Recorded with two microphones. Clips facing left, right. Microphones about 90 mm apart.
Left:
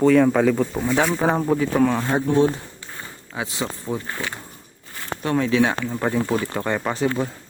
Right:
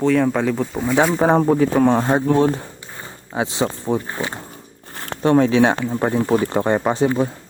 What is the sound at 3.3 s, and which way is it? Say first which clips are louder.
Speech: right 7 dB; 30° right (ahead or behind).